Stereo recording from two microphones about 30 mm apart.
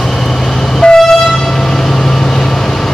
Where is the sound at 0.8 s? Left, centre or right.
Left.